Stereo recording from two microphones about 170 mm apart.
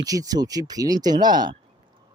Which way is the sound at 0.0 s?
20° right (ahead or behind).